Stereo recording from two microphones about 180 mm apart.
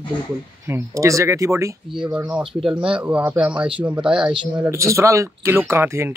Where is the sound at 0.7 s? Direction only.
15° right (ahead or behind).